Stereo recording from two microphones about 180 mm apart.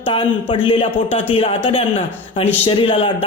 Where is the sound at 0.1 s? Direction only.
30° left (ahead or behind).